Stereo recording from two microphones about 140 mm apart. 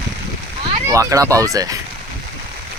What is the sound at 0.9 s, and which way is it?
Speech, 25° right (ahead or behind).